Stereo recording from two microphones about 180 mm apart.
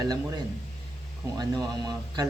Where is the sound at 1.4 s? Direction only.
20° right (ahead or behind).